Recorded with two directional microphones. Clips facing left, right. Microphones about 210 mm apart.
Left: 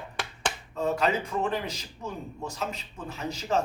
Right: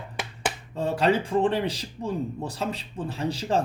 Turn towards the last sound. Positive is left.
turn(degrees=-30)  # may be behind; listen again after turning